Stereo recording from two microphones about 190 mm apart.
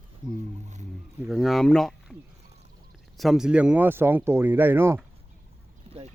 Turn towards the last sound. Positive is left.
turn(degrees=-10)  # may be behind; listen again after turning